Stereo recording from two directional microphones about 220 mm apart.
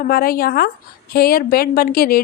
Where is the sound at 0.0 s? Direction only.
45° left (ahead or behind).